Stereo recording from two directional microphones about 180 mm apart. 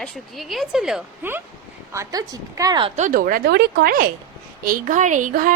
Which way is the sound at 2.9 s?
45° right (ahead or behind).